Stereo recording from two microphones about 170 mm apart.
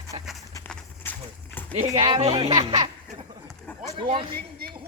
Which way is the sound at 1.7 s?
40° right (ahead or behind).